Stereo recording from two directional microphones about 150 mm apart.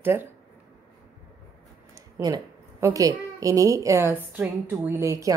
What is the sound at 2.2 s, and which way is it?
A woman's voice, 25° right (ahead or behind).